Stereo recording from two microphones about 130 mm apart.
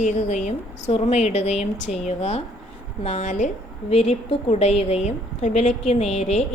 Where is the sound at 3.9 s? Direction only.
50° left (ahead or behind).